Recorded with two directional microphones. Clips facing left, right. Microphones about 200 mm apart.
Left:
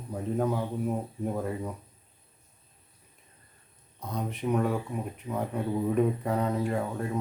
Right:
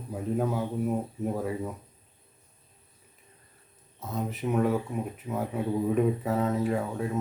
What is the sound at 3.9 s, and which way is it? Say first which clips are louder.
Speech: right 1 dB; 5° right (ahead or behind).